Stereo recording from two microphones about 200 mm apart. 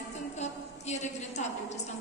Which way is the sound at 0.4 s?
35° left (ahead or behind).